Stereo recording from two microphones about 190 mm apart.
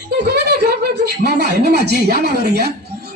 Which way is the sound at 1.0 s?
60° right (ahead or behind).